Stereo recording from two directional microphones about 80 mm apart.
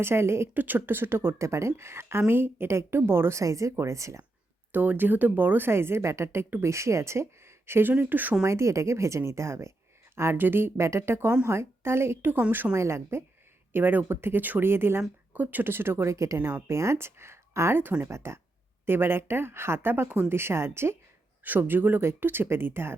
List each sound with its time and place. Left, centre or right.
0.0 s speech: right
4.7 s speech: right
8.4 s speech: right